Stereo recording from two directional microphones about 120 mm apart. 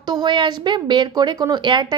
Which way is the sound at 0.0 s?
40° right (ahead or behind).